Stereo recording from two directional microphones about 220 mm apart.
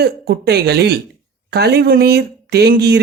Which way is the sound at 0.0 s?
50° right (ahead or behind).